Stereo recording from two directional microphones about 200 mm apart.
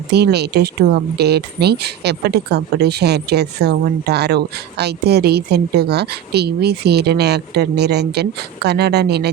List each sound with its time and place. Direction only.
0.1 s speech: 55° right (ahead or behind)